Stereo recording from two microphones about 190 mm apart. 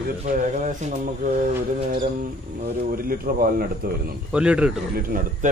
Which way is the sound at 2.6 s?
50° right (ahead or behind).